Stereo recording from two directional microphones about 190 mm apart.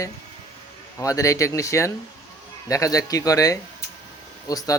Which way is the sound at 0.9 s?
15° left (ahead or behind).